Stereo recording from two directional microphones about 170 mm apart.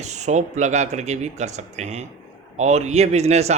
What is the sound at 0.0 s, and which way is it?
Speech, 40° right (ahead or behind).